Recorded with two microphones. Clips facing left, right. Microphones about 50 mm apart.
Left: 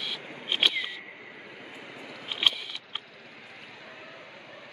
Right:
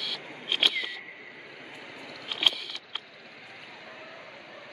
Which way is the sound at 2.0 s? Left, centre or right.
Left.